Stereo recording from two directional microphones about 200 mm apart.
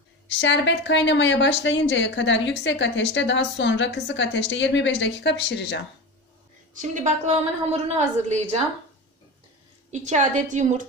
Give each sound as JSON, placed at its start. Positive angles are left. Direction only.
{"t": 0.3, "sound": "a woman's voice", "side_deg": 65}
{"t": 6.7, "sound": "a woman's voice", "side_deg": -40}
{"t": 9.8, "sound": "a woman's voice", "side_deg": -35}